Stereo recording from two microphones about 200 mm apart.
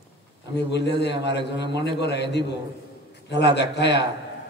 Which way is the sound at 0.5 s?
60° left (ahead or behind).